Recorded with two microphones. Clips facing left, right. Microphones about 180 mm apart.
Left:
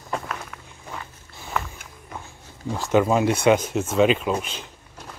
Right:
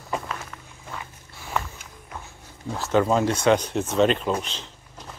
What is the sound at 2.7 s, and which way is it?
Speech, 10° left (ahead or behind).